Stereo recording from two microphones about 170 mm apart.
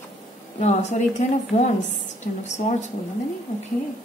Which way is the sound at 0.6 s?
40° left (ahead or behind).